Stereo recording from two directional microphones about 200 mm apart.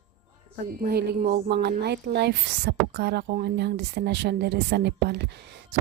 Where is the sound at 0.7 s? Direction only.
55° right (ahead or behind).